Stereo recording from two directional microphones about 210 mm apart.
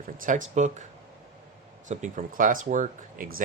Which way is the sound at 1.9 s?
35° right (ahead or behind).